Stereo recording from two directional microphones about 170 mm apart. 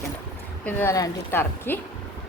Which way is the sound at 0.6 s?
15° left (ahead or behind).